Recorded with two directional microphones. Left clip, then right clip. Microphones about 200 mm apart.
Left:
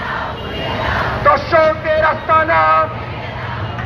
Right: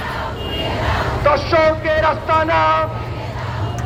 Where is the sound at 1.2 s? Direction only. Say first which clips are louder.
Left 2 dB; 40° right (ahead or behind).